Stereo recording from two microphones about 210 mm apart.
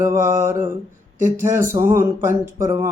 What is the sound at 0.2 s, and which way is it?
Speech, 10° right (ahead or behind).